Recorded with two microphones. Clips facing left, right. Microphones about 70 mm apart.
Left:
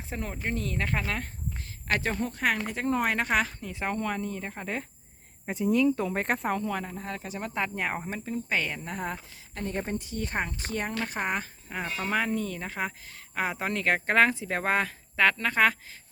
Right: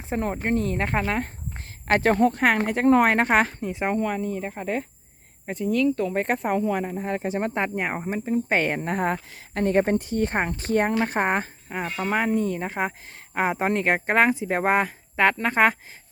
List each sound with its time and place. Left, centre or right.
0.1 s speech: right
2.0 s speech: right
3.2 s speech: right
3.6 s speech: right; by 4.9 s centre
5.5 s speech: centre
6.1 s speech: centre; by 7.2 s right
7.2 s speech: right
7.8 s speech: centre
8.4 s speech: right
11.9 s speech: right